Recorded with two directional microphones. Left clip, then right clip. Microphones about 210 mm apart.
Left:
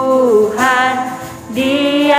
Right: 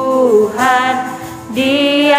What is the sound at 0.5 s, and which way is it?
Music, centre (ahead or behind).